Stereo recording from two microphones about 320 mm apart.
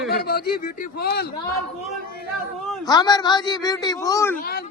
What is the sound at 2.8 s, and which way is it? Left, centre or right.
A man's voice, centre.